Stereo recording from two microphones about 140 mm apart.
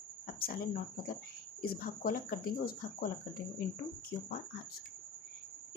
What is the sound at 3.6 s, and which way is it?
Speech, 90° left.